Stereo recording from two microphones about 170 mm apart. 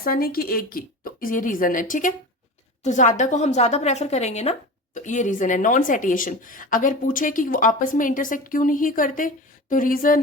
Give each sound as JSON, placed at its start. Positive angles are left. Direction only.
{"t": 0.0, "sound": "a woman's voice", "side_deg": 60}